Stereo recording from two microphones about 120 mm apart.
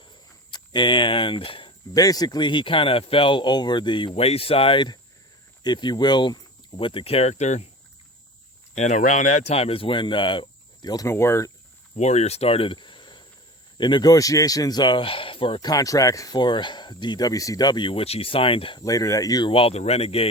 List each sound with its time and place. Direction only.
0.5 s speech: 40° left (ahead or behind)
1.9 s speech: 30° left (ahead or behind); by 7.7 s 70° left (ahead or behind)
8.7 s speech: 80° left; by 10.9 s 45° left (ahead or behind)
10.9 s speech: 25° left (ahead or behind)
11.9 s speech: 70° left (ahead or behind); by 15.6 s 45° left (ahead or behind)
15.6 s speech: 30° left (ahead or behind); by 18.8 s 50° left (ahead or behind)
18.8 s speech: 30° left (ahead or behind)
19.5 s speech: 50° left (ahead or behind)